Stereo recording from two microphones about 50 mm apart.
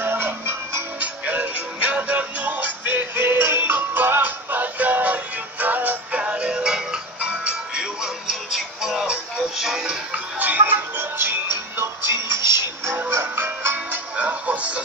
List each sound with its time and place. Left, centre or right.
0.0 s music: right
0.9 s music: right
6.1 s music: right
10.4 s music: right
12.0 s music: right
13.2 s music: right
14.1 s music: right